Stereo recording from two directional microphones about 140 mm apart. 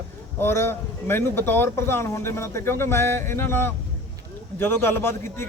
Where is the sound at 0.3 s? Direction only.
15° left (ahead or behind).